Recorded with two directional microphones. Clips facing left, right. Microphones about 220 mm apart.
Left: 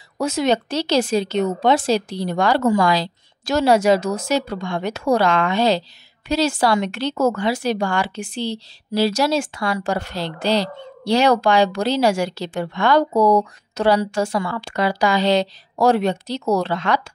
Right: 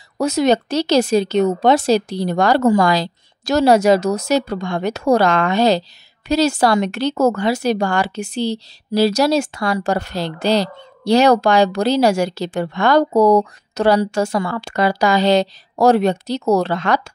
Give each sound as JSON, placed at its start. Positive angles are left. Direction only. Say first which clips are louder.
{"t": 0.2, "sound": "a woman's voice", "louder": "right 4 dB", "side_deg": -40}